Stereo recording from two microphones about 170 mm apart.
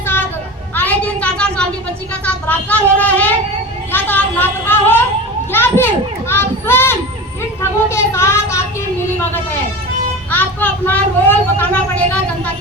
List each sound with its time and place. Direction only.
0.8 s a sound: 10° left (ahead or behind)
2.2 s speech: 10° left (ahead or behind)
3.9 s a sound: 10° left (ahead or behind)
5.5 s a child's voice: 15° left (ahead or behind)
7.6 s vehicle: 15° left (ahead or behind)
10.3 s speech: 10° left (ahead or behind)